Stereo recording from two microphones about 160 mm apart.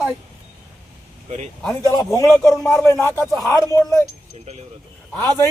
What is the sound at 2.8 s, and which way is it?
Speech, 15° left (ahead or behind).